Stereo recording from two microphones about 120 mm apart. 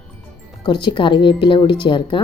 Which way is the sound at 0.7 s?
40° left (ahead or behind).